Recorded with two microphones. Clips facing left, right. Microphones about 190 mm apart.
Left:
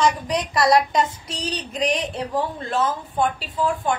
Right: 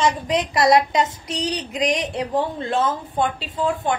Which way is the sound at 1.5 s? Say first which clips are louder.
Even; 15° right (ahead or behind).